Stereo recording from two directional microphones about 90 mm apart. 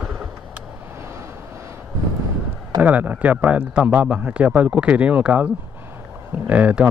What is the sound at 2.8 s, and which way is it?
A man's voice, 15° right (ahead or behind).